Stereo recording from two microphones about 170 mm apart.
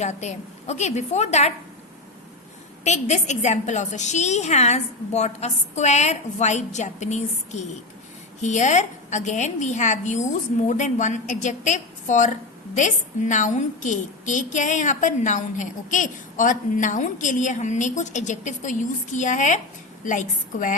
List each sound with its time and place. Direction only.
0.0 s a woman's voice: 40° left (ahead or behind)
2.8 s a woman's voice: 40° left (ahead or behind)